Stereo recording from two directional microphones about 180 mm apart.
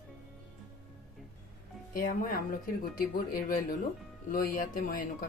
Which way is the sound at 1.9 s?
50° left (ahead or behind).